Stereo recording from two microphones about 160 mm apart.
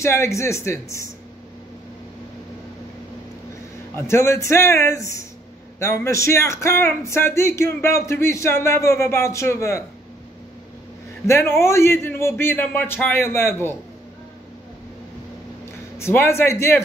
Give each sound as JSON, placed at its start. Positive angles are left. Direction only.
{"t": 0.0, "sound": "speech", "side_deg": 15}
{"t": 3.9, "sound": "speech", "side_deg": 15}
{"t": 11.2, "sound": "speech", "side_deg": 15}
{"t": 16.0, "sound": "speech", "side_deg": 15}